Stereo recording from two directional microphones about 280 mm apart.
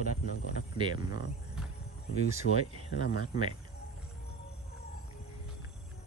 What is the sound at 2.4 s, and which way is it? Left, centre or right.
Speech, left.